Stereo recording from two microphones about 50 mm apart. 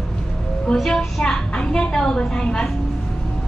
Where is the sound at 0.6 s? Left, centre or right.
Centre.